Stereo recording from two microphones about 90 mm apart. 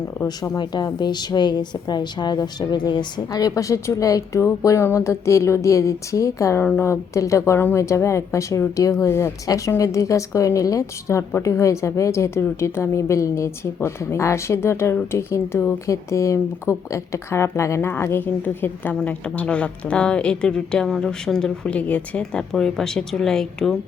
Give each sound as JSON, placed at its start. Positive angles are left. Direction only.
{"t": 0.6, "sound": "a woman's voice", "side_deg": 50}
{"t": 6.6, "sound": "a woman's voice", "side_deg": 25}